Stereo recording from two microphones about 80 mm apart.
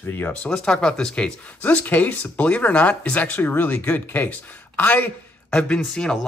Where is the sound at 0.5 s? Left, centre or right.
Centre.